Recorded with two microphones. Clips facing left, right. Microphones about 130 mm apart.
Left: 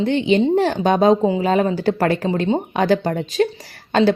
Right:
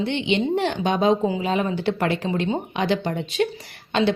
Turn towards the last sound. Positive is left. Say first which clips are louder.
# left 5 dB
turn(degrees=45)  # may be behind; listen again after turning